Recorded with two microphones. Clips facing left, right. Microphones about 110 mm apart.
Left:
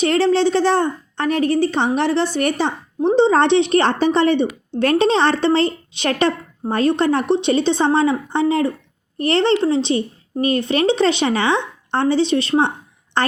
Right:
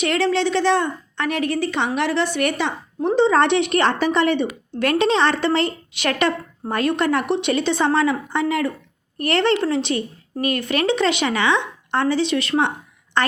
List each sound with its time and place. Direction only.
0.0 s a woman's voice: 30° left (ahead or behind)